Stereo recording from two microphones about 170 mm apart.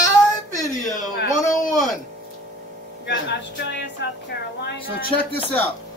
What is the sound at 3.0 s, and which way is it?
A woman's voice, 90° left.